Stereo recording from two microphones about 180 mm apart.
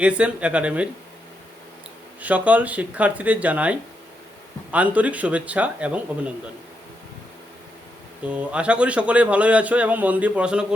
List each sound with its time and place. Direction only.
0.0 s a man's voice: 5° right (ahead or behind)
2.2 s a man's voice: 10° right (ahead or behind)
8.2 s a man's voice: 5° right (ahead or behind)